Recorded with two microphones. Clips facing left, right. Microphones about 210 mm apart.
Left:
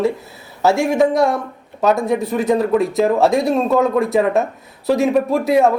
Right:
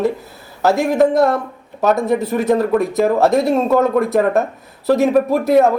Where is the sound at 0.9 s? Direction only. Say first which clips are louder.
Right 2 dB; centre (ahead or behind).